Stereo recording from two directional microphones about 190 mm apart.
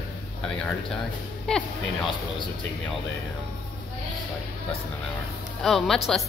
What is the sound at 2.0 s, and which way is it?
Speech, 25° left (ahead or behind).